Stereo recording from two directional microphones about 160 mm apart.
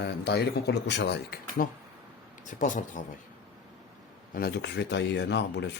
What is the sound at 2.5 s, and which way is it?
Speech, 50° left (ahead or behind).